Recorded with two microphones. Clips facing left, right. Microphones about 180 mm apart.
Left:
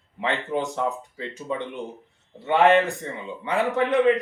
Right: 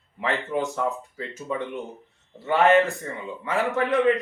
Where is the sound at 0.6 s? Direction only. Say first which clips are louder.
Even; 20° left (ahead or behind).